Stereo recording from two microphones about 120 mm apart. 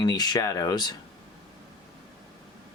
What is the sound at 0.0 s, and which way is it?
Speech, 35° left (ahead or behind).